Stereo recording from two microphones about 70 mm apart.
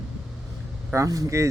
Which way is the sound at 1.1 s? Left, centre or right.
Right.